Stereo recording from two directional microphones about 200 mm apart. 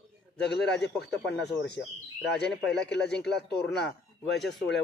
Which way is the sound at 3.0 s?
5° left (ahead or behind).